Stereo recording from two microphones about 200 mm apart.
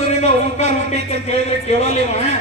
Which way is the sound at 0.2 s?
35° left (ahead or behind).